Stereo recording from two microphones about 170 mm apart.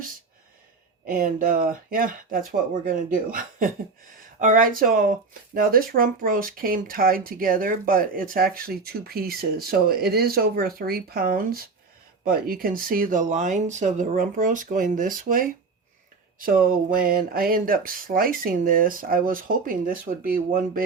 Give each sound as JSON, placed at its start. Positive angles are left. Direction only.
{"t": 1.0, "sound": "speech", "side_deg": -55}